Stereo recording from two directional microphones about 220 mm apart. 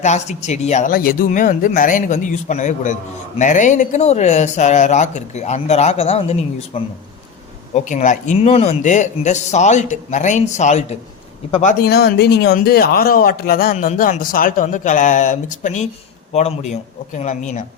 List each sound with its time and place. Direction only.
0.0 s speech: 30° left (ahead or behind)
11.8 s speech: 45° left (ahead or behind)